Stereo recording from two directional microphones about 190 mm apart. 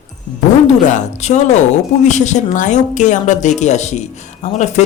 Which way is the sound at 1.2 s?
40° left (ahead or behind).